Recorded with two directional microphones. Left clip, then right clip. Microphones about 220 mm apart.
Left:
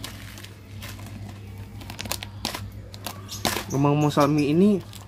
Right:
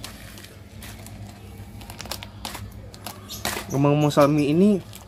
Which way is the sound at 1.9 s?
25° left (ahead or behind).